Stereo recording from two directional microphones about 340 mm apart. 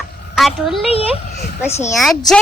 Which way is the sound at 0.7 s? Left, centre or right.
Centre.